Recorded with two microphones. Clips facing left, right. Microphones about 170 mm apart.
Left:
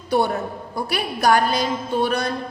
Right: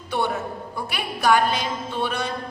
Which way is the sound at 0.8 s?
40° left (ahead or behind).